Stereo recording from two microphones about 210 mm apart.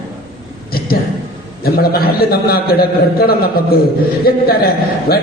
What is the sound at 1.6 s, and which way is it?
A man's voice, 45° left (ahead or behind).